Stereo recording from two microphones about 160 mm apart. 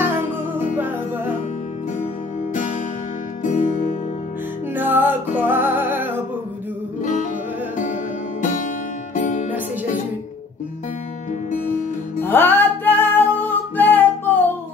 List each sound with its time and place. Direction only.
0.7 s music: 10° right (ahead or behind)
2.5 s music: 55° left (ahead or behind)
4.7 s music: 10° right (ahead or behind)
7.0 s music: 50° left (ahead or behind)
12.2 s music: 15° left (ahead or behind)